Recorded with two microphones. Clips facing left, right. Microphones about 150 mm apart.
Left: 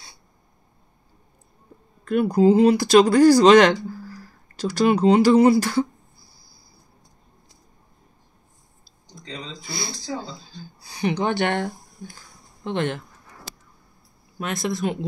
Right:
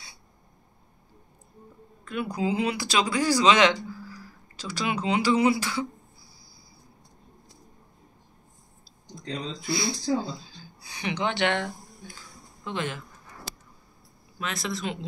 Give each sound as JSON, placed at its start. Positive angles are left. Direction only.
{"t": 2.0, "sound": "speech", "side_deg": 45}
{"t": 10.8, "sound": "speech", "side_deg": 35}
{"t": 12.6, "sound": "speech", "side_deg": 60}
{"t": 14.4, "sound": "speech", "side_deg": 55}